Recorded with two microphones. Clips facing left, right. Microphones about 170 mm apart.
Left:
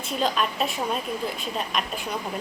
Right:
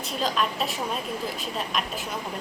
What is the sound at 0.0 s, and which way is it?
A woman's voice, centre (ahead or behind).